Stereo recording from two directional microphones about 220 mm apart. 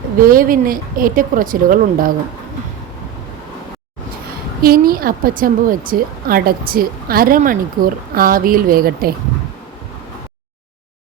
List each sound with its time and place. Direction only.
0.2 s a woman's voice: 40° right (ahead or behind)
4.6 s a woman's voice: 40° right (ahead or behind)